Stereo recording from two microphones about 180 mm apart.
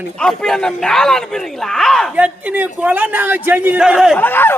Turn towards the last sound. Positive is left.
turn(degrees=10)  # may be behind; listen again after turning